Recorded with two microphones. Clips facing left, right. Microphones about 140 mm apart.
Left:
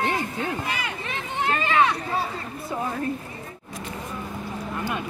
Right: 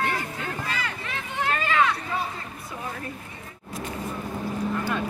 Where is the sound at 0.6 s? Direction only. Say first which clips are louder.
Left 2 dB; 20° left (ahead or behind).